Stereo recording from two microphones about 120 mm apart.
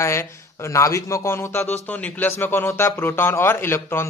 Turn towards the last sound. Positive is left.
turn(degrees=20)  # may be behind; listen again after turning